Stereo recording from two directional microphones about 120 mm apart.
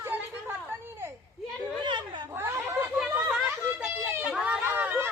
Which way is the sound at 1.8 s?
40° right (ahead or behind).